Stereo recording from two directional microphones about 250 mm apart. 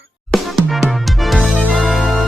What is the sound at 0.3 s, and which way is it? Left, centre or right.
Music, centre.